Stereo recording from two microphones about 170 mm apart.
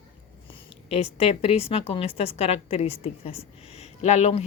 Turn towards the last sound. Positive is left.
turn(degrees=40)  # may be behind; listen again after turning